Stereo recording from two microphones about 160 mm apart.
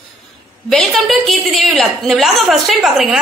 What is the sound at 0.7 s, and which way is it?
A woman's voice, centre (ahead or behind).